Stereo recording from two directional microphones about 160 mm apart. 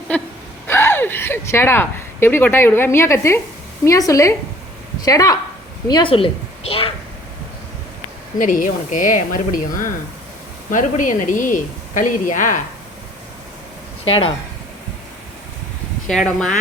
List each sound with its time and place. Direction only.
0.1 s a sound: 10° left (ahead or behind)
0.7 s a woman's voice: 15° left (ahead or behind); by 6.9 s 35° left (ahead or behind)
8.4 s a woman's voice: 55° left (ahead or behind)
14.0 s speech: 35° left (ahead or behind)
16.0 s speech: 5° left (ahead or behind)